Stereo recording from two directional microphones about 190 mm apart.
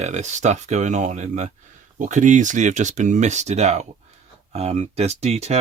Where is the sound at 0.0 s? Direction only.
40° right (ahead or behind).